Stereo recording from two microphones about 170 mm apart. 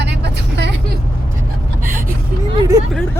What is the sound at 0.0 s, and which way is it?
Vehicle, 85° right.